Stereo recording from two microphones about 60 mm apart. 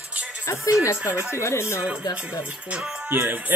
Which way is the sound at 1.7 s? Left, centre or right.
Right.